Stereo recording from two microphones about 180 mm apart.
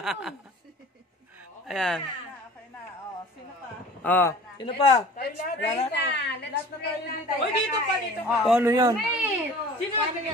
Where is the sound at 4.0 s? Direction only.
10° left (ahead or behind).